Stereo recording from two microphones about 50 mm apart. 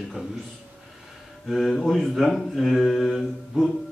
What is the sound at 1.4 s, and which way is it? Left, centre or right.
Speech, centre.